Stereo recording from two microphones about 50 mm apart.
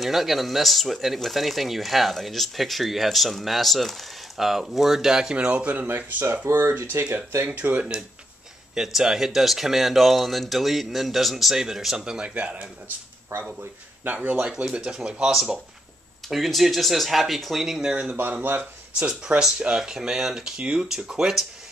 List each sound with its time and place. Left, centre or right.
0.0 s speech: centre
5.3 s speech: right
5.9 s speech: right
6.4 s speech: right
6.7 s speech: right
7.4 s speech: right
8.7 s speech: centre
12.4 s speech: right
13.3 s speech: right
14.0 s speech: right
14.5 s speech: centre
16.3 s speech: centre
17.8 s speech: centre
21.1 s speech: centre